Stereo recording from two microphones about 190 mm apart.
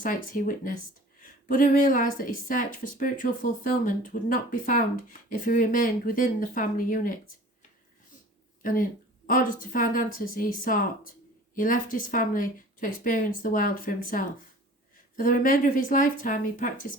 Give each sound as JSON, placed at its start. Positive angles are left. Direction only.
{"t": 0.0, "sound": "speech", "side_deg": 45}
{"t": 8.6, "sound": "speech", "side_deg": 45}